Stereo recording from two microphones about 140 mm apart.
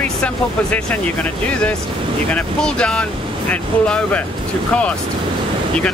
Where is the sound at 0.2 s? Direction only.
10° left (ahead or behind).